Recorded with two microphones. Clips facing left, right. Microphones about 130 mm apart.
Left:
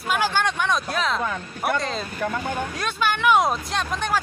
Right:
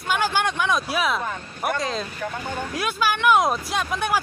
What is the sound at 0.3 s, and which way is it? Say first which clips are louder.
Speech: even; 5° right (ahead or behind).